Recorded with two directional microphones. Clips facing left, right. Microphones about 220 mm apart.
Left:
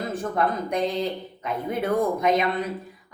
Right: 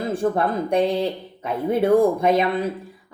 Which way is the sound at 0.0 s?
30° right (ahead or behind).